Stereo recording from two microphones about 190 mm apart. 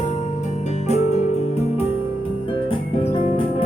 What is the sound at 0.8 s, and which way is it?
Music, 35° left (ahead or behind).